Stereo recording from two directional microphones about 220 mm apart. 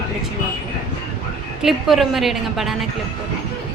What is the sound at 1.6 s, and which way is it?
A woman's voice, centre (ahead or behind).